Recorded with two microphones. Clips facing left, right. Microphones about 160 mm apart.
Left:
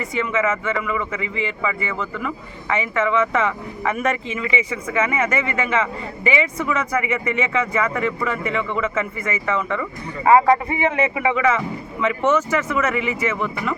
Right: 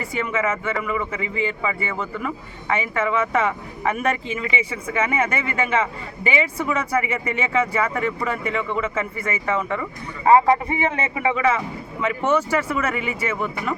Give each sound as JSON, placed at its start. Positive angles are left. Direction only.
{"t": 0.0, "sound": "speech", "side_deg": -35}
{"t": 11.1, "sound": "speech", "side_deg": -35}